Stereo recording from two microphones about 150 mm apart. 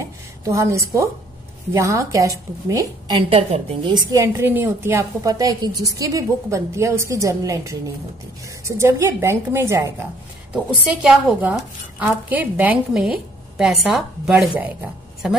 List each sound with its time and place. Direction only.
0.0 s a sound: 20° right (ahead or behind)
1.7 s a woman's voice: 20° right (ahead or behind)
3.2 s a woman's voice: 35° right (ahead or behind)
4.1 s a woman's voice: 20° right (ahead or behind)
10.5 s a woman's voice: 5° right (ahead or behind)